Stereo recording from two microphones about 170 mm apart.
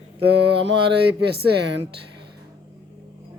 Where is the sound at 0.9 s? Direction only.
85° right.